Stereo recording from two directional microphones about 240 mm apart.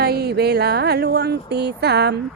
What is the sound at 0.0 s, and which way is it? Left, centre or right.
Speech, right.